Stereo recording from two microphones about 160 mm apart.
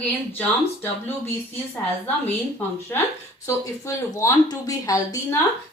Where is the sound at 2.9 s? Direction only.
10° left (ahead or behind).